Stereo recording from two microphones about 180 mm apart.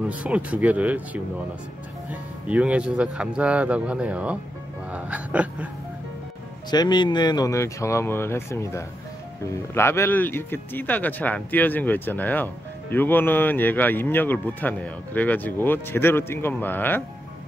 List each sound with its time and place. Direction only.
0.1 s speech: 5° right (ahead or behind)
4.9 s hiccup: 10° right (ahead or behind)
6.7 s speech: 25° left (ahead or behind)